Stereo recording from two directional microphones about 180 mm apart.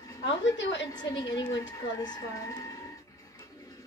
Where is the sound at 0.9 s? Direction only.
20° left (ahead or behind).